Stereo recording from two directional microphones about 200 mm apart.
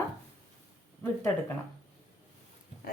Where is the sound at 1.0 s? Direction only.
15° left (ahead or behind).